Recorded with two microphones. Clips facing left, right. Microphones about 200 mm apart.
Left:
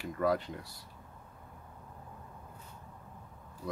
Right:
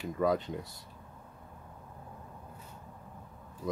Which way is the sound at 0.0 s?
20° right (ahead or behind).